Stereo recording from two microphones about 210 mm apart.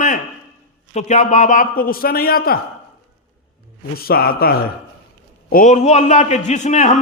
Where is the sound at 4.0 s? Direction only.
45° left (ahead or behind).